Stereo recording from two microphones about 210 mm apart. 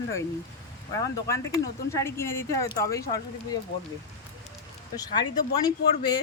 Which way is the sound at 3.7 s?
55° left (ahead or behind).